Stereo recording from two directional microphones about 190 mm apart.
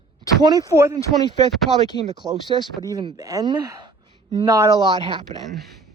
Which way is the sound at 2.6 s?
20° right (ahead or behind).